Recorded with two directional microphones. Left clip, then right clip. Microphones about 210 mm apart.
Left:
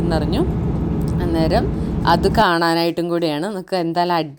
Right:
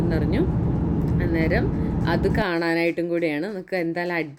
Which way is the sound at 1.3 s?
25° left (ahead or behind).